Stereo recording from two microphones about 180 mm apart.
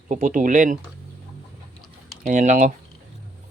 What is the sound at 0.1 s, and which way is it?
Speech, 45° right (ahead or behind).